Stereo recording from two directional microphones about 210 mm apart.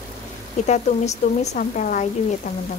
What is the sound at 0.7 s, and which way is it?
Sizzle, 35° left (ahead or behind).